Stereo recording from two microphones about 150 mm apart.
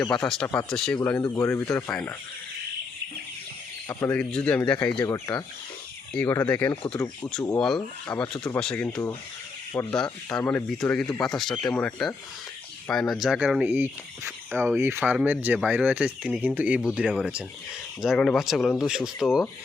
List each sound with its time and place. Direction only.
0.0 s speech: 5° left (ahead or behind)
1.3 s speech: 15° left (ahead or behind)
3.8 s speech: 15° left (ahead or behind)
4.9 s speech: 20° left (ahead or behind)
7.5 s speech: 5° left (ahead or behind)